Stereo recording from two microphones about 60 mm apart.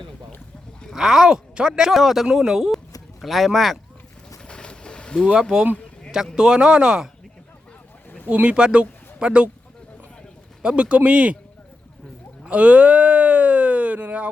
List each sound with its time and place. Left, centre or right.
0.9 s speech: centre
4.4 s a sound: centre
5.3 s speech: centre
8.3 s speech: centre
10.6 s speech: centre
12.5 s speech: right